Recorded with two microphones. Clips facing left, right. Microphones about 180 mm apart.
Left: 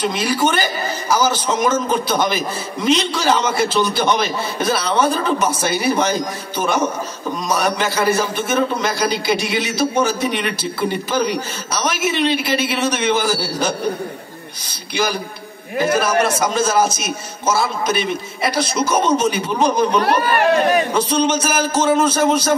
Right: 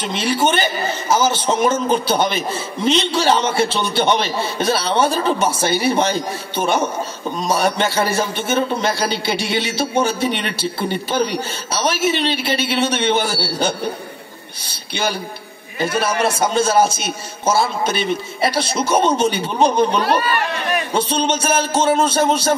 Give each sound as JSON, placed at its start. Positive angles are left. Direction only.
{"t": 0.0, "sound": "a man's voice", "side_deg": -25}
{"t": 15.8, "sound": "a man's voice", "side_deg": -30}
{"t": 20.0, "sound": "speech", "side_deg": 60}
{"t": 20.9, "sound": "a man's voice", "side_deg": -30}